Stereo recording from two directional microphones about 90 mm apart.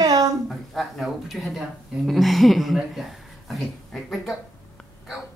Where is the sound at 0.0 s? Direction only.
45° right (ahead or behind).